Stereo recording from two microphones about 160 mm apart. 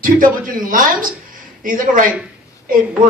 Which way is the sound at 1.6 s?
60° right (ahead or behind).